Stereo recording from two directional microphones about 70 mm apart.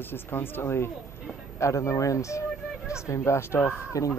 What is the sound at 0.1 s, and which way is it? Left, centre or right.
Speech, left.